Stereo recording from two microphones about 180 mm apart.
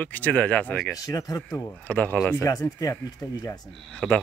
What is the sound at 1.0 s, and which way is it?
Speech, 20° left (ahead or behind).